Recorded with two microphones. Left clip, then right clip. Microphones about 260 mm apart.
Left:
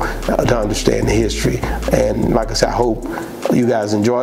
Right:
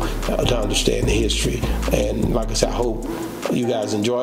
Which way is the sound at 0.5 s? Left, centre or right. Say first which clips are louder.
Left 4 dB; left.